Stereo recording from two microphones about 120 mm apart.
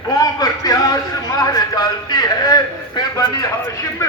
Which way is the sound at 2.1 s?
35° left (ahead or behind).